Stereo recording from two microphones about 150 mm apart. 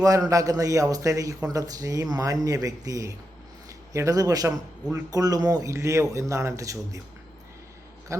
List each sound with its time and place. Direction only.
0.0 s a man's voice: 20° right (ahead or behind)
8.1 s a man's voice: 20° right (ahead or behind)